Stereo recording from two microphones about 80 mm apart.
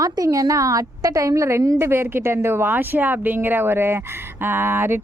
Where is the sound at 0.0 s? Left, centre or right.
Right.